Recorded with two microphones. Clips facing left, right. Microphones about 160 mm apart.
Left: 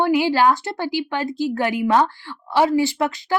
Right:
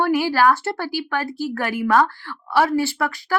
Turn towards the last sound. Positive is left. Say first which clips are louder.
# left 2 dB
turn(degrees=20)  # may be behind; listen again after turning